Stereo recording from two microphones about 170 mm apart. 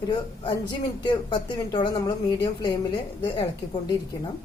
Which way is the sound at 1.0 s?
25° left (ahead or behind).